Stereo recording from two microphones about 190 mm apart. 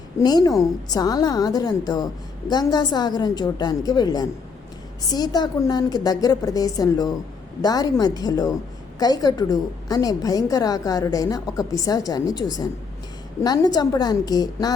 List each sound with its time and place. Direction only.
0.2 s a woman's voice: 20° left (ahead or behind)